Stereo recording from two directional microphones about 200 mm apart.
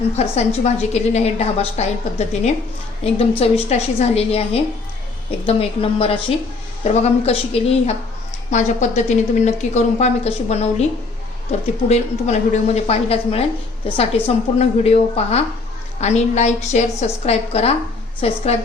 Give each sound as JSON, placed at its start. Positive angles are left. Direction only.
{"t": 0.2, "sound": "a woman's voice", "side_deg": 35}
{"t": 11.9, "sound": "a woman's voice", "side_deg": 35}